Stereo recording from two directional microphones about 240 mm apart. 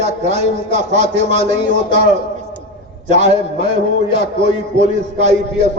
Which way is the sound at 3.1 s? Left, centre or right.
Right.